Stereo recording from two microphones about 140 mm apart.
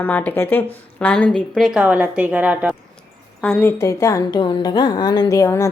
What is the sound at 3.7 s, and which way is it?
A woman's voice, 20° left (ahead or behind).